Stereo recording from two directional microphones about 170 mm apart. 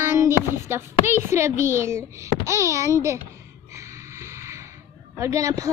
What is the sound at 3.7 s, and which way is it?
Snort, 15° right (ahead or behind).